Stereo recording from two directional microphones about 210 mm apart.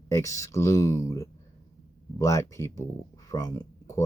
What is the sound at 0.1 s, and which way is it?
Speech, 15° left (ahead or behind).